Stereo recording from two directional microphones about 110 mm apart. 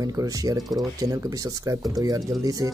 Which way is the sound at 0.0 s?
35° right (ahead or behind).